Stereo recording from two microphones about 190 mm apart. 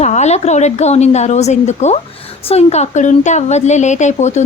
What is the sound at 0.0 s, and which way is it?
Speech, 35° left (ahead or behind).